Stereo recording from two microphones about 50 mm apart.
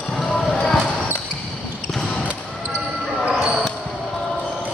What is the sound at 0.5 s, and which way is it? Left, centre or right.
Basketball bounce, centre.